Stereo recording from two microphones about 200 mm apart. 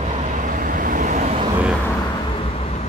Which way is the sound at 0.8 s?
40° right (ahead or behind).